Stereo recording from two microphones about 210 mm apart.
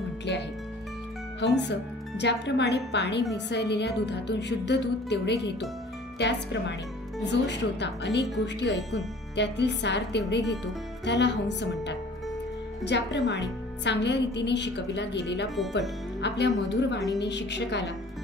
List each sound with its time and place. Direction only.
1.4 s a woman's voice: 55° left (ahead or behind)
15.4 s speech: centre (ahead or behind)
16.2 s a woman's voice: 55° left (ahead or behind)